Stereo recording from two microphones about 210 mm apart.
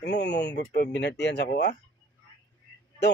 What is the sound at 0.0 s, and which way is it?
Speech, 55° left (ahead or behind).